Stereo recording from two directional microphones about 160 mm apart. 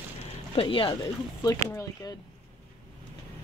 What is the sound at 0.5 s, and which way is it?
Speech, 35° left (ahead or behind).